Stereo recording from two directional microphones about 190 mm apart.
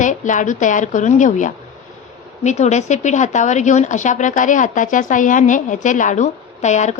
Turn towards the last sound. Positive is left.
turn(degrees=40)  # may be behind; listen again after turning